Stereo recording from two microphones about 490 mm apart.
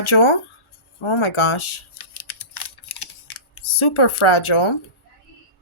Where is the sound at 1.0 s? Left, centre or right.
Left.